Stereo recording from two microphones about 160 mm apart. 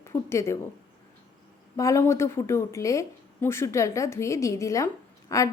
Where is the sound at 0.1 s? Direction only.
15° left (ahead or behind).